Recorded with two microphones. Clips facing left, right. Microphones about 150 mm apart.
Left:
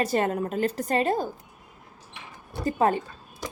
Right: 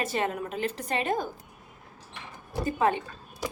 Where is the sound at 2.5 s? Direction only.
35° left (ahead or behind).